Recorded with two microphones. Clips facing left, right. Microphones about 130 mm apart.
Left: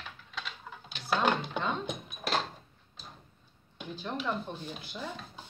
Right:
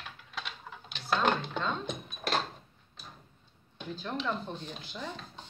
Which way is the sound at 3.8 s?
15° left (ahead or behind).